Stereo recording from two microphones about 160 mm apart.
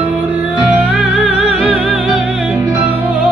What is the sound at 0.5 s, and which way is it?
Music, 10° right (ahead or behind).